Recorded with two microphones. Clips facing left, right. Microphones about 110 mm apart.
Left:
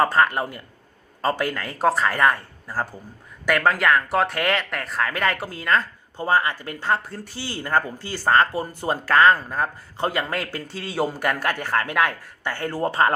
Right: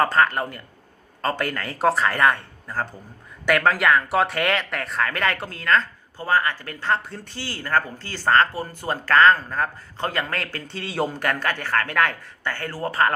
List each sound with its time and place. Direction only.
0.0 s speech: 5° left (ahead or behind)
6.1 s speech: 20° left (ahead or behind)